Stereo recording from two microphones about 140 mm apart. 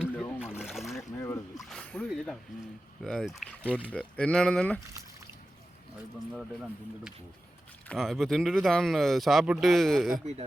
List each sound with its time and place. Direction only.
0.3 s splash: 5° right (ahead or behind)
1.2 s a sound: 20° left (ahead or behind)
1.6 s a sound: 5° left (ahead or behind)
2.0 s speech: centre (ahead or behind)
3.6 s speech: 10° right (ahead or behind)
3.8 s speech: 10° left (ahead or behind)
6.3 s speech: 5° right (ahead or behind)